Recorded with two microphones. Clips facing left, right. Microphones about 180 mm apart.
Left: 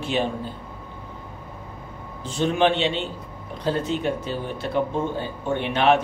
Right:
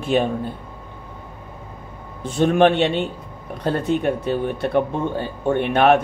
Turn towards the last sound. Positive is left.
turn(degrees=-55)  # may be behind; listen again after turning